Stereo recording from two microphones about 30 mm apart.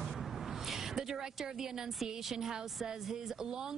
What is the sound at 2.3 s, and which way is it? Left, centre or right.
Speech, right.